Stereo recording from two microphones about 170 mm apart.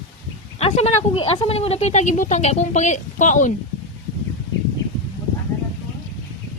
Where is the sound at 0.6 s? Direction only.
35° left (ahead or behind).